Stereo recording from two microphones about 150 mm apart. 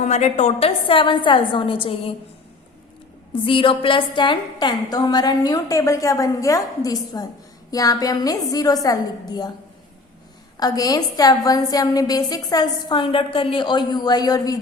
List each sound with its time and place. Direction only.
0.0 s a woman's voice: 50° left (ahead or behind)
3.4 s a woman's voice: 35° left (ahead or behind)
10.6 s a woman's voice: 25° left (ahead or behind)